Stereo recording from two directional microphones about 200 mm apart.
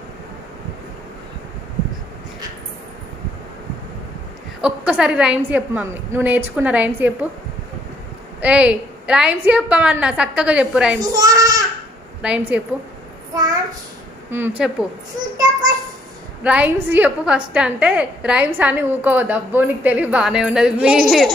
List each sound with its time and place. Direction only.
4.6 s a woman's voice: 5° right (ahead or behind)
8.4 s a woman's voice: 5° right (ahead or behind)
11.0 s speech: 20° right (ahead or behind)
12.2 s a woman's voice: 5° right (ahead or behind)
13.3 s a sound: 20° right (ahead or behind)
14.3 s a woman's voice: 10° right (ahead or behind)
16.4 s a woman's voice: 5° right (ahead or behind)